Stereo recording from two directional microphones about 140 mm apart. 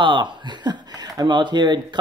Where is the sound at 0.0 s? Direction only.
35° right (ahead or behind).